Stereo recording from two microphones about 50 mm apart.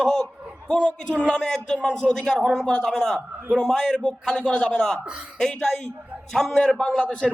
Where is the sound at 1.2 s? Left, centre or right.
Centre.